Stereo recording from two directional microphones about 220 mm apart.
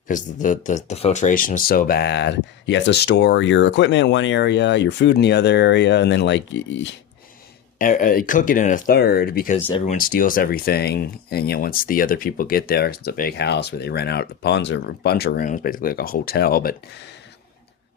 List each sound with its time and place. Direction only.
0.1 s speech: 35° left (ahead or behind); by 6.9 s 55° left (ahead or behind)
7.8 s speech: 40° left (ahead or behind)
9.6 s speech: 30° left (ahead or behind)